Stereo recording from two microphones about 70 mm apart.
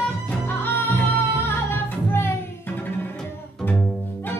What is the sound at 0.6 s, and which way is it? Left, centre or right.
Music, left.